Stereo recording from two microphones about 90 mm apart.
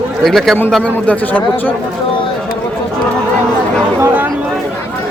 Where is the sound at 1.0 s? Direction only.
20° left (ahead or behind).